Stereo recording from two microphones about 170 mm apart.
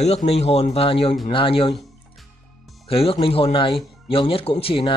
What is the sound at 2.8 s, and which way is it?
Speech, 35° left (ahead or behind).